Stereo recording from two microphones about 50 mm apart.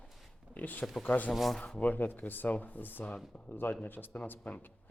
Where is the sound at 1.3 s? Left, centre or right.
Centre.